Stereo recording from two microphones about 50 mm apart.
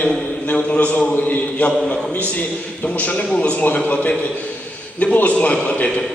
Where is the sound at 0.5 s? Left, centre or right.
Left.